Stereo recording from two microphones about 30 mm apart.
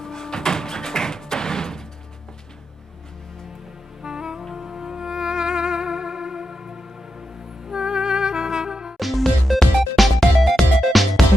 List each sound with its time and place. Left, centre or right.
0.0 s music: centre
4.0 s music: right
9.0 s music: centre